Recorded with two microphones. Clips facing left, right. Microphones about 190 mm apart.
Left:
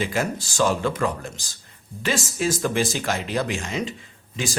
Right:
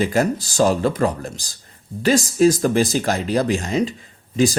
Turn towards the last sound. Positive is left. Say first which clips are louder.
# right 10 dB
turn(degrees=-35)  # may be behind; listen again after turning